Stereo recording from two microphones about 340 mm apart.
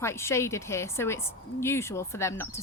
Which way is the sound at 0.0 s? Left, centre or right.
Centre.